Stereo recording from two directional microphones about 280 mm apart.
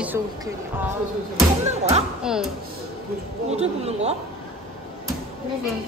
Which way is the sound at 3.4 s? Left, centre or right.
Right.